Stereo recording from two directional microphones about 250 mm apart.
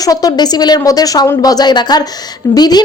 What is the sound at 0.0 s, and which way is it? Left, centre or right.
A woman's voice, centre.